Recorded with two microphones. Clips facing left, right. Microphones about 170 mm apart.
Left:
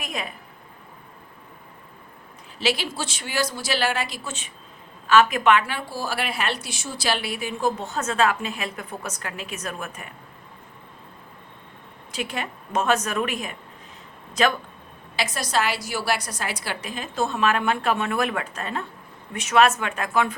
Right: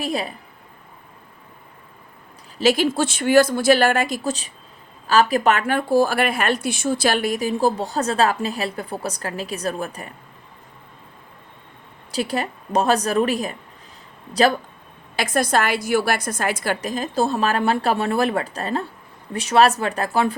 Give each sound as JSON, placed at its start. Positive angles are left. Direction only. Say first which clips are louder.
{"t": 0.0, "sound": "a woman's voice", "louder": "right 8 dB", "side_deg": -35}
{"t": 2.6, "sound": "a woman's voice", "louder": "right 8 dB", "side_deg": -45}
{"t": 12.1, "sound": "a woman's voice", "louder": "right 6 dB", "side_deg": -35}
{"t": 15.1, "sound": "a woman's voice", "louder": "right 5 dB", "side_deg": -50}